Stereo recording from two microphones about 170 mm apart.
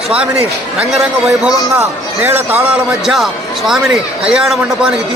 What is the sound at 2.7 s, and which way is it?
A man's voice, 5° right (ahead or behind).